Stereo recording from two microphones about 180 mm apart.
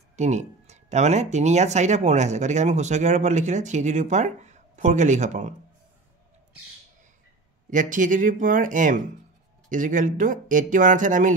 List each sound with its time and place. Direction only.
0.1 s speech: 40° right (ahead or behind)
7.7 s speech: 45° right (ahead or behind)